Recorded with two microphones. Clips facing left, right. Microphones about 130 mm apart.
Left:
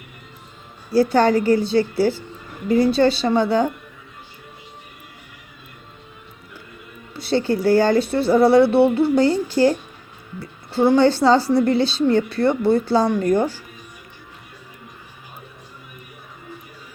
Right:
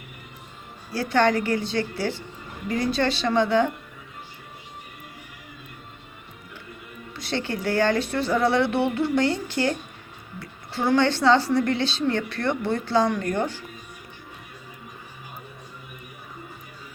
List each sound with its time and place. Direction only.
0.9 s a woman's voice: 35° left (ahead or behind)
7.3 s a woman's voice: 35° left (ahead or behind)